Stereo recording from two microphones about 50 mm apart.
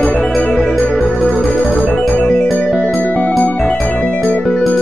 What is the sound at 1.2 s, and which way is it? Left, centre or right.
Music, left.